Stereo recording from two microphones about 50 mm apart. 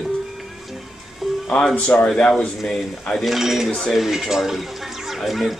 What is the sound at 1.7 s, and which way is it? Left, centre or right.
Speech, left.